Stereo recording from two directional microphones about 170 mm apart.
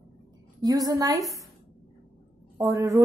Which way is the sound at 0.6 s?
20° right (ahead or behind).